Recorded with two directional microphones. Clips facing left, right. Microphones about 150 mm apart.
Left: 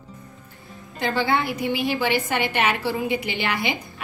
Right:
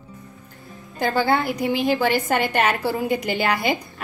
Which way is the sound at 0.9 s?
45° right (ahead or behind).